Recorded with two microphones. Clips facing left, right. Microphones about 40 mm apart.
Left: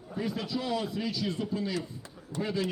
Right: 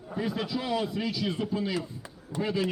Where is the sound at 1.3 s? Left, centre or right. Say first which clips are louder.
Right 2 dB; right.